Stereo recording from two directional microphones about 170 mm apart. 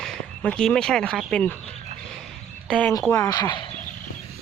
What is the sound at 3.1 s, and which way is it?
Speech, 20° left (ahead or behind).